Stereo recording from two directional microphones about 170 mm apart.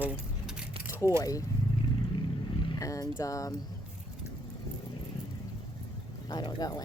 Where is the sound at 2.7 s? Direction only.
20° left (ahead or behind).